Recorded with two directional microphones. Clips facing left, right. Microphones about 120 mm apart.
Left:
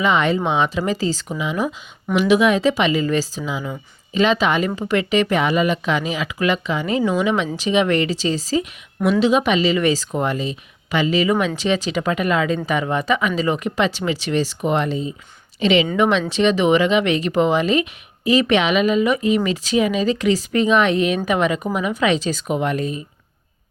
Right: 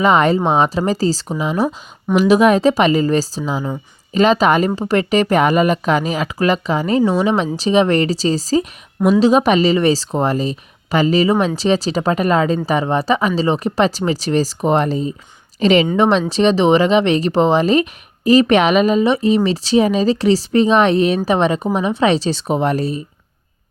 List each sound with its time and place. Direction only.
0.0 s a woman's voice: 40° right (ahead or behind)